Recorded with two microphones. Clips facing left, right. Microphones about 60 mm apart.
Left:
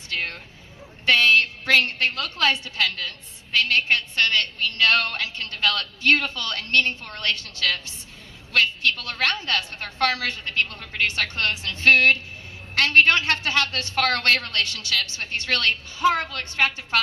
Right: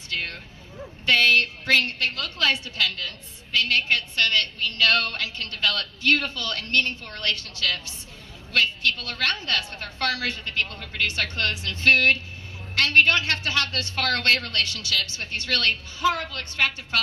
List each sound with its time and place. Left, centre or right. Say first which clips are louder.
0.1 s bow-wow: left 2 dB; left
1.0 s a woman's voice: left 1 dB; left
7.3 s a woman's voice: even; right
7.6 s a woman's voice: left 2 dB; left